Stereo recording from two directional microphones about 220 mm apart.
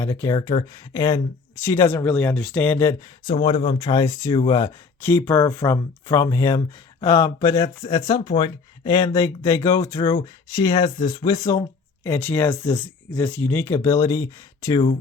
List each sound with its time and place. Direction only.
0.0 s speech: 15° left (ahead or behind)
3.3 s speech: 25° left (ahead or behind)